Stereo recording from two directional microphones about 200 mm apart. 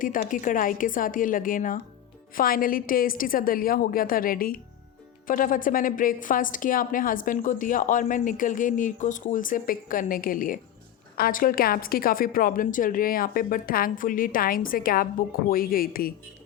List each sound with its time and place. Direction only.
0.0 s a woman's voice: 40° left (ahead or behind)